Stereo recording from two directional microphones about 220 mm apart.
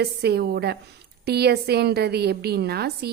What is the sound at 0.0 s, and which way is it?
A woman's voice, 45° right (ahead or behind).